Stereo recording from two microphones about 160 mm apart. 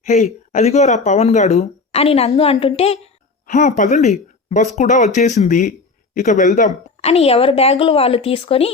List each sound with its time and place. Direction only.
0.0 s a woman's voice: 45° left (ahead or behind)
3.4 s speech: 50° left (ahead or behind)
7.0 s a woman's voice: 40° left (ahead or behind)